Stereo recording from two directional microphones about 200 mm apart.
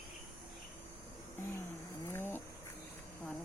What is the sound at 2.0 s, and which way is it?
Cat, 10° left (ahead or behind).